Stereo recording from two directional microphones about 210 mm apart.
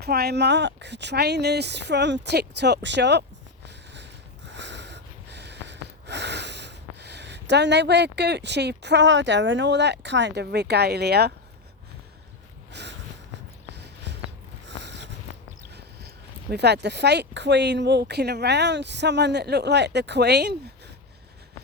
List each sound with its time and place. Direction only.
0.0 s speech: 50° right (ahead or behind)
4.4 s snort: 55° right (ahead or behind)
12.7 s a sound: 55° right (ahead or behind)
15.7 s speech: 50° right (ahead or behind)